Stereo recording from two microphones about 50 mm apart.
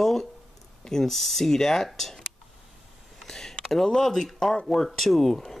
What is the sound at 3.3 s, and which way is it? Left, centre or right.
Speech, centre.